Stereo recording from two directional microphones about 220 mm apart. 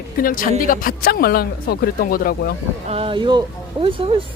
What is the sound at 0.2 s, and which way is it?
Speech, 40° left (ahead or behind).